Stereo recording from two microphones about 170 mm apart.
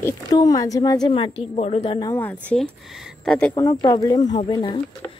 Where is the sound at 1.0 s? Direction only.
30° left (ahead or behind).